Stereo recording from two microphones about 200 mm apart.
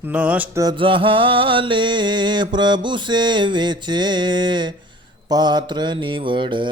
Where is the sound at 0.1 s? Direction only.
5° right (ahead or behind).